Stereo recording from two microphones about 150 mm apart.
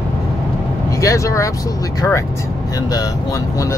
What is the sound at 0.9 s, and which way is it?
Speech, 20° left (ahead or behind).